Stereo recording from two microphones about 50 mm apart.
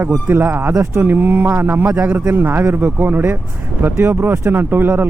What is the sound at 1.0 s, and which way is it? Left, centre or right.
Speech, right.